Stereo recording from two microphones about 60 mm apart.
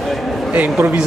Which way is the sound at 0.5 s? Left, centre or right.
Right.